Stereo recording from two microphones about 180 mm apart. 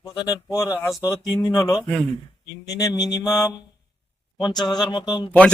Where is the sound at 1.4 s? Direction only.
20° left (ahead or behind).